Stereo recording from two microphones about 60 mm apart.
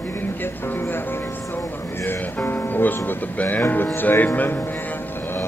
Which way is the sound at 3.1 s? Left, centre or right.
Left.